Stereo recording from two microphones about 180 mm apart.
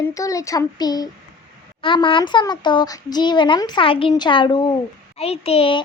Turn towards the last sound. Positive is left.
turn(degrees=30)  # may be behind; listen again after turning